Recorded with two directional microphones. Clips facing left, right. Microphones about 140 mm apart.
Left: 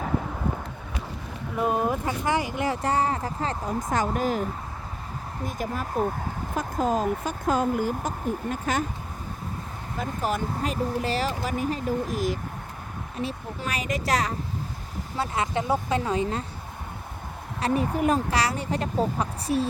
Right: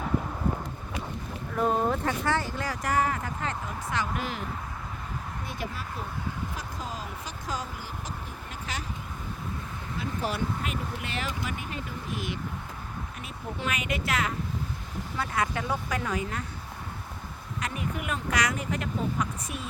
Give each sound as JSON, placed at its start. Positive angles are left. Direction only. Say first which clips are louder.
{"t": 1.5, "sound": "speech", "louder": "left 1 dB", "side_deg": 10}
{"t": 2.8, "sound": "speech", "louder": "right 1 dB", "side_deg": 30}
{"t": 5.5, "sound": "speech", "louder": "left 8 dB", "side_deg": 45}
{"t": 10.0, "sound": "speech", "louder": "left 3 dB", "side_deg": 45}
{"t": 15.2, "sound": "speech", "louder": "left 3 dB", "side_deg": 25}
{"t": 17.6, "sound": "speech", "louder": "left 10 dB", "side_deg": 35}